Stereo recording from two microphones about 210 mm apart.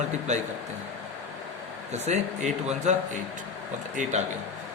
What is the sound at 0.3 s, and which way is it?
Speech, 35° right (ahead or behind).